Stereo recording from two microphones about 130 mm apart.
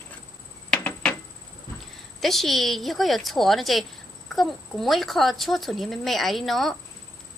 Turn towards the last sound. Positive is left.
turn(degrees=0)  # may be behind; listen again after turning